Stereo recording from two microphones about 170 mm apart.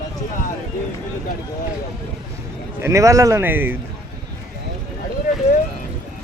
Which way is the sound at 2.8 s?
15° right (ahead or behind).